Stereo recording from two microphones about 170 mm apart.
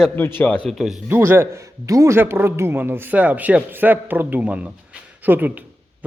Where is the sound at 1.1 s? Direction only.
15° right (ahead or behind).